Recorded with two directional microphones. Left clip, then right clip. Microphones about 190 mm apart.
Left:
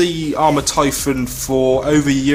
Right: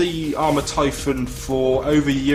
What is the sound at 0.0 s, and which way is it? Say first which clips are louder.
A man's voice: left 5 dB; 35° left (ahead or behind).